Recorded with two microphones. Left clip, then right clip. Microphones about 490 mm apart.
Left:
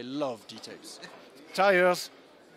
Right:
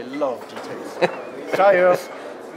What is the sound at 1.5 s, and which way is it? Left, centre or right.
Speech, left.